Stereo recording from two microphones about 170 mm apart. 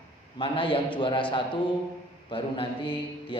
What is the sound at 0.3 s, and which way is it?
A man's voice, 30° left (ahead or behind).